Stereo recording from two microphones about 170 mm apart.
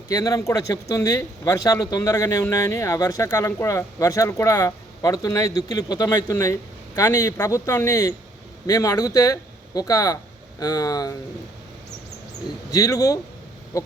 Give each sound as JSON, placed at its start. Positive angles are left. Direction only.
{"t": 0.1, "sound": "speech", "side_deg": 20}
{"t": 12.7, "sound": "speech", "side_deg": 20}